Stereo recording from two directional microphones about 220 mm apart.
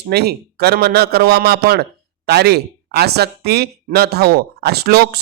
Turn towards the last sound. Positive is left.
turn(degrees=-45)  # may be behind; listen again after turning